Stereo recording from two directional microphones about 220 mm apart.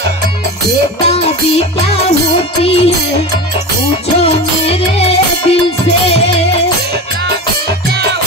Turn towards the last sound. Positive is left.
turn(degrees=30)  # may be behind; listen again after turning